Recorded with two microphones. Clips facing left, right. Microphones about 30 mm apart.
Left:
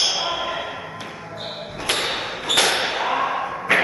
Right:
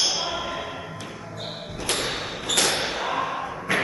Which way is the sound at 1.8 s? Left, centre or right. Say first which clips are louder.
Left 4 dB; left.